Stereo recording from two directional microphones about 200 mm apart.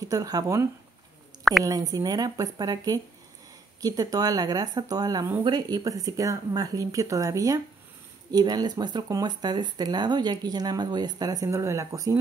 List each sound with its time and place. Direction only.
0.0 s speech: 15° right (ahead or behind)